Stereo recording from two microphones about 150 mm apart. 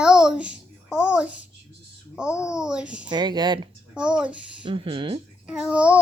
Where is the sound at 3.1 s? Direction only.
30° right (ahead or behind).